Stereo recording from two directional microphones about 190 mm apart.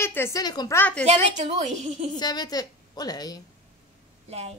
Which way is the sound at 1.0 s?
35° right (ahead or behind).